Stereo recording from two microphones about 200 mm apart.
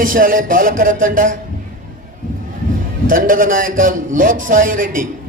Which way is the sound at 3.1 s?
45° right (ahead or behind).